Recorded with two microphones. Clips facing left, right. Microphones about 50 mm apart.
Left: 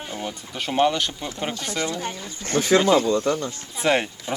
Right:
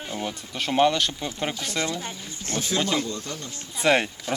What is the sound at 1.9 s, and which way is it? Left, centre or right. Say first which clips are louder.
Speech: left 3 dB; centre.